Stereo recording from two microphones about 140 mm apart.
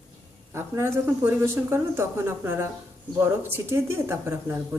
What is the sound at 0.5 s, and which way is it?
Speech, 20° right (ahead or behind).